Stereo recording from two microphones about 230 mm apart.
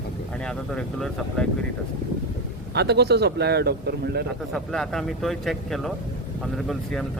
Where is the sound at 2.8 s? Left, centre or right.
Right.